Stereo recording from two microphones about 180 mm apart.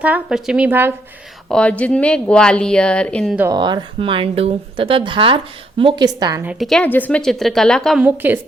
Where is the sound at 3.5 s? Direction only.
25° right (ahead or behind).